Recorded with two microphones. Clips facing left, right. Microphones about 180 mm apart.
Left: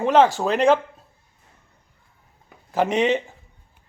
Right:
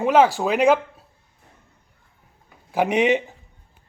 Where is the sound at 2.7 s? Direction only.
10° right (ahead or behind).